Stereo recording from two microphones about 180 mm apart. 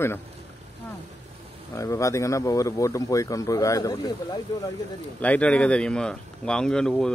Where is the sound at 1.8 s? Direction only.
15° left (ahead or behind).